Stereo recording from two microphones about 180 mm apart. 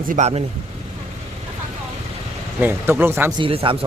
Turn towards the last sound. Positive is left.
turn(degrees=-30)  # may be behind; listen again after turning